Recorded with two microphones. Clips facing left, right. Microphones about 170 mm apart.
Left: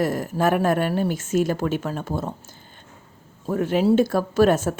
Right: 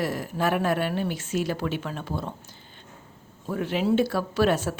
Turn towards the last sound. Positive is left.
turn(degrees=45)  # may be behind; listen again after turning